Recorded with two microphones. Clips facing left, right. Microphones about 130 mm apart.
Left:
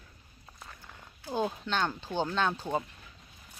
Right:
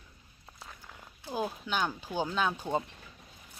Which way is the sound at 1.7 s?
10° right (ahead or behind).